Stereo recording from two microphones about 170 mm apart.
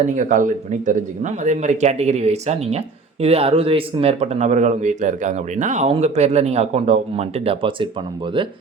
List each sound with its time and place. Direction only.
0.0 s speech: 45° right (ahead or behind)